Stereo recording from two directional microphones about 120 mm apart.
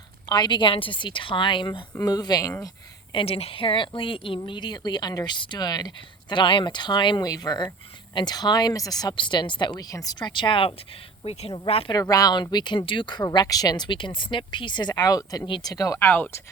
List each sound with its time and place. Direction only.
0.3 s speech: 40° left (ahead or behind)
3.1 s a woman's voice: 50° left (ahead or behind)
11.2 s a woman's voice: 55° left (ahead or behind)
11.9 s speech: 30° left (ahead or behind)
15.4 s a woman's voice: 45° left (ahead or behind)
15.7 s speech: 30° left (ahead or behind)
16.0 s speech: 15° left (ahead or behind)